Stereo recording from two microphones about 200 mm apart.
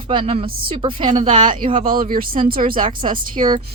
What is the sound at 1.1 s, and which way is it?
Speech, 40° right (ahead or behind).